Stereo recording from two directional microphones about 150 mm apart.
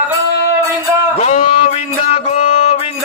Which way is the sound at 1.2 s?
45° left (ahead or behind).